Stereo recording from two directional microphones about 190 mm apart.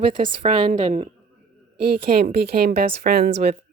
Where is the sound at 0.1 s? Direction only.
40° right (ahead or behind).